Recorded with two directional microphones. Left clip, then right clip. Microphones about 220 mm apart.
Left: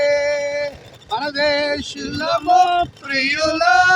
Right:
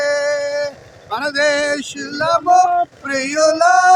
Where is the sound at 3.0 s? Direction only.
20° right (ahead or behind).